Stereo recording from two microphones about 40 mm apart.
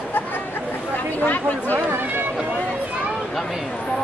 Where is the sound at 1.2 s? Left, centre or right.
Left.